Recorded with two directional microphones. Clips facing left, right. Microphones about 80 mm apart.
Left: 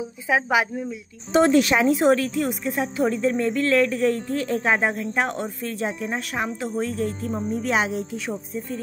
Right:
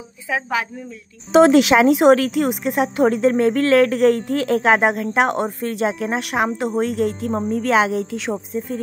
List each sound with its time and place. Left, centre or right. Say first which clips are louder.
0.3 s a woman's voice: left 2 dB; centre
1.3 s speech: right 6 dB; right